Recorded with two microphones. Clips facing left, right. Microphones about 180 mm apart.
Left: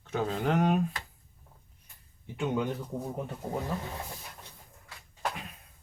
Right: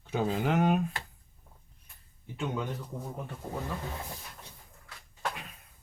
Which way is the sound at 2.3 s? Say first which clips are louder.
Left 4 dB; 15° left (ahead or behind).